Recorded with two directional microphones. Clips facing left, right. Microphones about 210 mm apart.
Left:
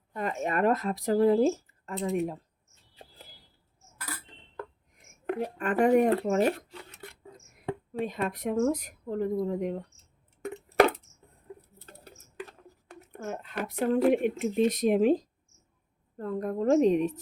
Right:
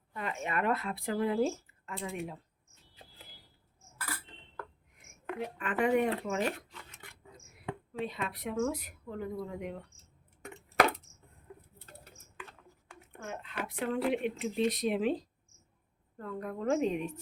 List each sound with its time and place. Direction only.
0.1 s speech: 45° left (ahead or behind)
5.4 s a woman's voice: 40° left (ahead or behind)
11.9 s speech: 40° left (ahead or behind)